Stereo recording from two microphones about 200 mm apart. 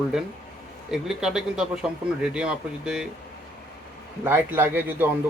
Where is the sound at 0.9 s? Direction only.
Centre (ahead or behind).